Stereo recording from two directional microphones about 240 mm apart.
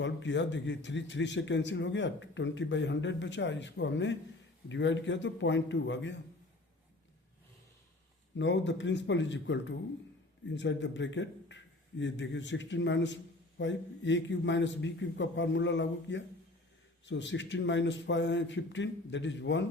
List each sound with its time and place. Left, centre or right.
0.0 s a man's voice: left
8.4 s a man's voice: left